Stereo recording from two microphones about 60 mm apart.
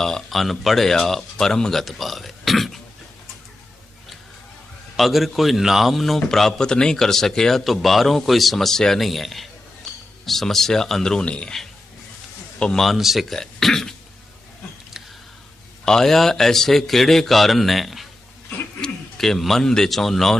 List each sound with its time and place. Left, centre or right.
0.0 s a man's voice: centre
4.9 s a man's voice: centre
12.5 s speech: centre
12.8 s a man's voice: centre
15.8 s a man's voice: centre